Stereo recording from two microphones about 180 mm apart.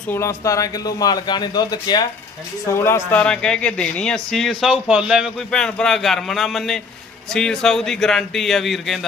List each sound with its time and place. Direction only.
0.1 s speech: 15° left (ahead or behind)